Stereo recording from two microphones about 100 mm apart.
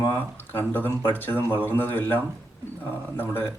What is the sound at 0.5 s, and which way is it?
A man's voice, 20° left (ahead or behind).